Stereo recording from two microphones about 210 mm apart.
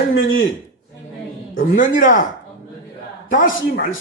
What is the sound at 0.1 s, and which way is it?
Speech, 70° left (ahead or behind).